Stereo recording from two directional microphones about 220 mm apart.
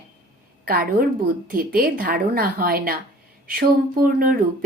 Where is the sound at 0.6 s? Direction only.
40° right (ahead or behind).